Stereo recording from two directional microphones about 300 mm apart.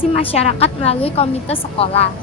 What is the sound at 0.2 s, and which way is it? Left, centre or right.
A woman's voice, centre.